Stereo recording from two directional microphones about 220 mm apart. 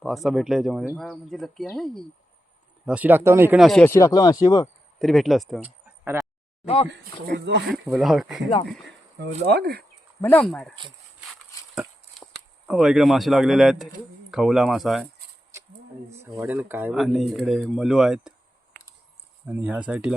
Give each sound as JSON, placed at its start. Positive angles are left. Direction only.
{"t": 0.0, "sound": "speech", "side_deg": 0}
{"t": 4.9, "sound": "speech", "side_deg": 0}
{"t": 7.3, "sound": "speech", "side_deg": -50}
{"t": 7.7, "sound": "speech", "side_deg": 0}
{"t": 9.5, "sound": "speech", "side_deg": -45}
{"t": 10.2, "sound": "speech", "side_deg": 10}
{"t": 16.0, "sound": "speech", "side_deg": -10}
{"t": 19.5, "sound": "speech", "side_deg": -5}